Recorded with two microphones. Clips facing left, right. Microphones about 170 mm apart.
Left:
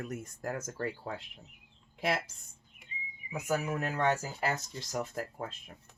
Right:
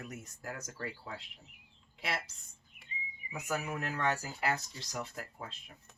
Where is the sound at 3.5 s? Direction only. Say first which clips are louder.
Left 4 dB; 40° left (ahead or behind).